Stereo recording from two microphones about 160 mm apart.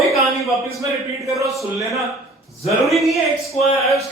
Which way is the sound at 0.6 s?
20° right (ahead or behind).